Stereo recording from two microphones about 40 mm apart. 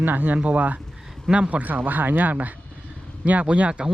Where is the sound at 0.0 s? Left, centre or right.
Right.